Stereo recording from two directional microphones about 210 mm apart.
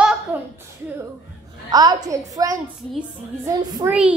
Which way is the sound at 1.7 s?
20° right (ahead or behind).